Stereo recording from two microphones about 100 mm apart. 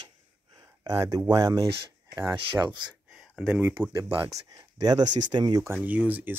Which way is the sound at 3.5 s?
15° right (ahead or behind).